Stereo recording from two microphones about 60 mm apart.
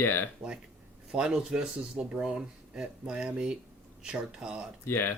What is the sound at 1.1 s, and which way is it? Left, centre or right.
Speech, centre.